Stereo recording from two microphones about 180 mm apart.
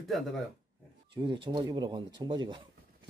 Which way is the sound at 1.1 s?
25° right (ahead or behind).